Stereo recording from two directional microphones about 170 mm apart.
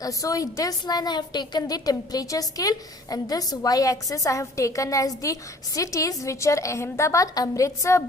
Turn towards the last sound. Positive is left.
turn(degrees=15)  # may be behind; listen again after turning